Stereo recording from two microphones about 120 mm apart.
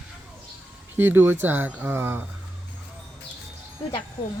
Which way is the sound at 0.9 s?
15° right (ahead or behind).